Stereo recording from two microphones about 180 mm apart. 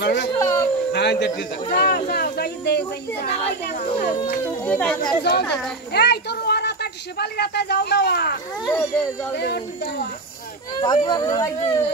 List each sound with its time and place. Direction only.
0.0 s speech: 75° left (ahead or behind)
0.3 s speech: 15° left (ahead or behind)
0.9 s a man's voice: 75° left (ahead or behind)
4.6 s speech: 5° left (ahead or behind)
5.9 s speech: 65° left (ahead or behind)
8.6 s speech: 15° left (ahead or behind)
9.4 s a man's voice: 65° left (ahead or behind)
10.8 s speech: 25° left (ahead or behind)